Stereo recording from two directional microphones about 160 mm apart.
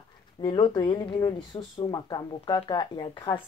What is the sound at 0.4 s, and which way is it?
Speech, 30° left (ahead or behind).